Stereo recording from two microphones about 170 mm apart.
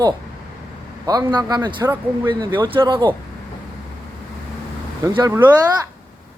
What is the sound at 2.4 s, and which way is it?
Speech, 30° right (ahead or behind).